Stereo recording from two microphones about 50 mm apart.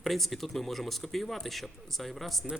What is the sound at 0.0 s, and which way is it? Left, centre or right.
A man's voice, centre.